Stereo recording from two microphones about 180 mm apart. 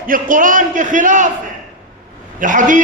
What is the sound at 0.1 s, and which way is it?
A man's voice, 50° right (ahead or behind).